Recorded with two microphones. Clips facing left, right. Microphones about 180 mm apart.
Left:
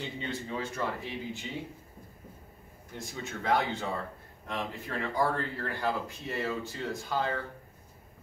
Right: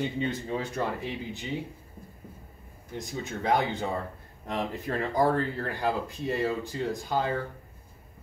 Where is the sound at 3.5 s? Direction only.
15° right (ahead or behind).